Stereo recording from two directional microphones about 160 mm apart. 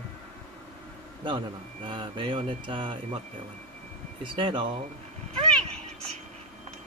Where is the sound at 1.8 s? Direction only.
30° right (ahead or behind).